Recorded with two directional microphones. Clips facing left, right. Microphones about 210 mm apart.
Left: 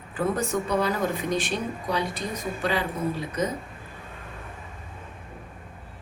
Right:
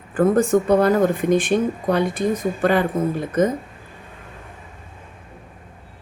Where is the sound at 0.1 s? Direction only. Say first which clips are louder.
Right 10 dB; 50° right (ahead or behind).